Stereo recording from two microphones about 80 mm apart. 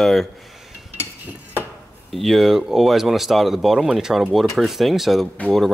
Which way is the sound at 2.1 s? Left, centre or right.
Centre.